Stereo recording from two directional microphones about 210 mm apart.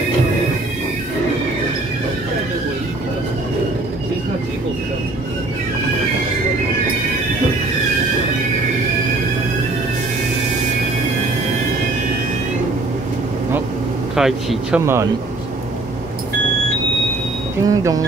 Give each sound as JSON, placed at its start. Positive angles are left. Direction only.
{"t": 14.1, "sound": "speech", "side_deg": 0}
{"t": 17.6, "sound": "speech", "side_deg": -15}